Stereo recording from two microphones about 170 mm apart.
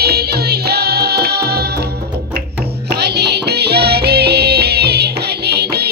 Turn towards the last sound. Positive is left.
turn(degrees=-70)  # may be behind; listen again after turning